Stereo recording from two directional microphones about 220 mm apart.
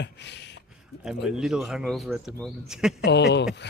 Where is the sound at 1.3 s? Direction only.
Centre (ahead or behind).